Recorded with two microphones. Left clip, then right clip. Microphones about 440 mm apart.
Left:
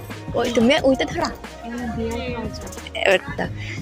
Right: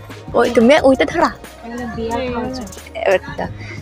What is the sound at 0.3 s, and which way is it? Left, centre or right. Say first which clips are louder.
Speech: right 7 dB; left.